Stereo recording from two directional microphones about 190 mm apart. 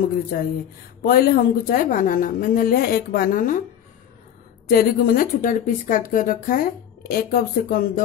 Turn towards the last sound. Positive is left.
turn(degrees=50)  # may be behind; listen again after turning